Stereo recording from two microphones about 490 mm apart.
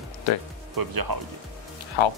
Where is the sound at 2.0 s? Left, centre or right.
Left.